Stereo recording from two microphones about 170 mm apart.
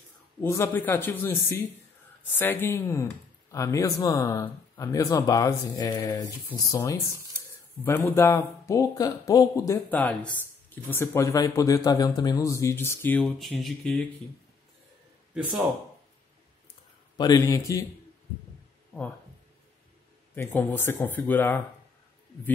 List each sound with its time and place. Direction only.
0.4 s speech: 15° left (ahead or behind)
17.2 s speech: 20° left (ahead or behind)
20.3 s speech: 10° left (ahead or behind)